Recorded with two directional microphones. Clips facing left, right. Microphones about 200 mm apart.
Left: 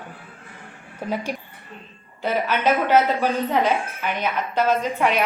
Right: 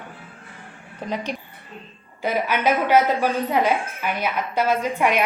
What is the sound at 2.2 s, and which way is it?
Speech, 10° right (ahead or behind).